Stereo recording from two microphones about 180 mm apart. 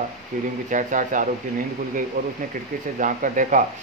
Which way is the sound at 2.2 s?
55° right (ahead or behind).